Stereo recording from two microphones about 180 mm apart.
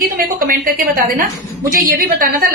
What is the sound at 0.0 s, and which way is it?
Speech, 55° right (ahead or behind).